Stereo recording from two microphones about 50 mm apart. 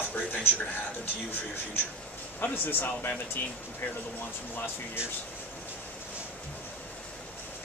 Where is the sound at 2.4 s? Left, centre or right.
Left.